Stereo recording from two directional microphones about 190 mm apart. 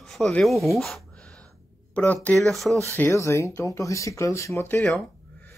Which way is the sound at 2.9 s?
15° left (ahead or behind).